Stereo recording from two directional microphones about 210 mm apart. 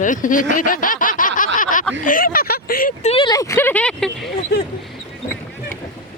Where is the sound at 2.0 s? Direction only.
40° left (ahead or behind).